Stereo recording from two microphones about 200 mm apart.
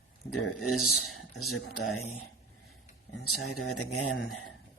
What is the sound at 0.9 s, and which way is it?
Speech, 90° left.